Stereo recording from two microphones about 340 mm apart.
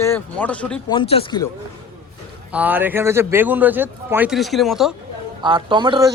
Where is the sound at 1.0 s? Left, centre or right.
Centre.